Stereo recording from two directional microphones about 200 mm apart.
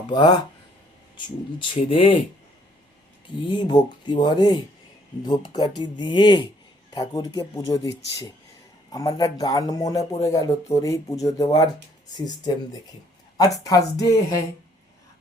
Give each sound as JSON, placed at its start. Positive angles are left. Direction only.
{"t": 0.1, "sound": "speech", "side_deg": 20}
{"t": 3.2, "sound": "speech", "side_deg": 25}
{"t": 13.3, "sound": "speech", "side_deg": 20}